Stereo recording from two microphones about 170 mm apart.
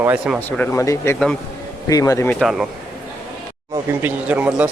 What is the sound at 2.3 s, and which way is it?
Speech, centre (ahead or behind).